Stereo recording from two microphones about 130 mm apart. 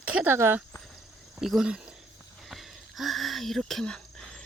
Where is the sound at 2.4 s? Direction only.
Centre (ahead or behind).